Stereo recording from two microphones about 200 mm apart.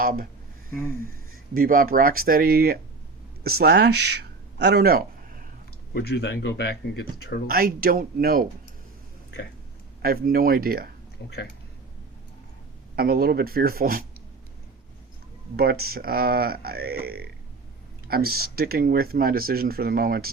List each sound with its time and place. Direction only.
0.0 s speech: 45° right (ahead or behind)
1.5 s speech: 45° right (ahead or behind)
5.9 s speech: 55° left (ahead or behind)
7.4 s speech: 45° right (ahead or behind)
10.0 s speech: 50° right (ahead or behind)
11.2 s speech: 65° left (ahead or behind)
13.0 s speech: 50° right (ahead or behind)
15.5 s speech: 50° right (ahead or behind)